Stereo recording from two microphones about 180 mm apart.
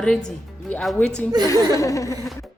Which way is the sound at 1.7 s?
15° left (ahead or behind).